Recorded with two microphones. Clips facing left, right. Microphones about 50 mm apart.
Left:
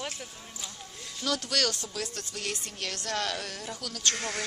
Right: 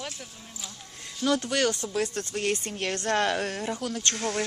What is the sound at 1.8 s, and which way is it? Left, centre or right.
Speech, right.